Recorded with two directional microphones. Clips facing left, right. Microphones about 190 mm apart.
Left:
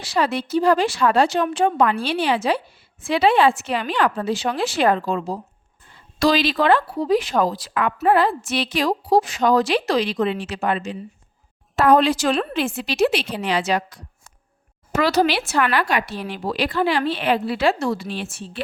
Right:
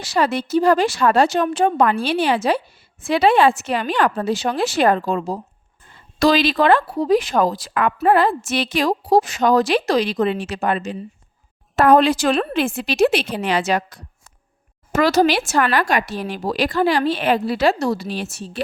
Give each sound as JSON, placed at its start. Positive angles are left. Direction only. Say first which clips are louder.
{"t": 0.0, "sound": "speech", "louder": "right 2 dB", "side_deg": -45}